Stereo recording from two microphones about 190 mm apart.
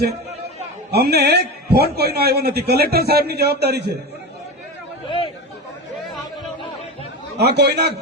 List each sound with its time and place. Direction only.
0.9 s a man's voice: 60° right (ahead or behind)
5.0 s speech: 25° left (ahead or behind)
7.3 s a man's voice: 60° right (ahead or behind)